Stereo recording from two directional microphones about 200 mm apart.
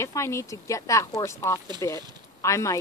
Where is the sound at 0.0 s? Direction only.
15° left (ahead or behind).